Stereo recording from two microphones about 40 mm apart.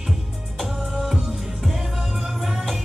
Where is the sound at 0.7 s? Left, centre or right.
Centre.